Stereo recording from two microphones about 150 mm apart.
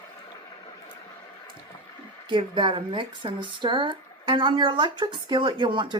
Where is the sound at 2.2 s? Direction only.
30° right (ahead or behind).